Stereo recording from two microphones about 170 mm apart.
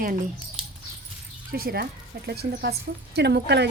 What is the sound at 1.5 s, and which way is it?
A woman's voice, 60° right (ahead or behind).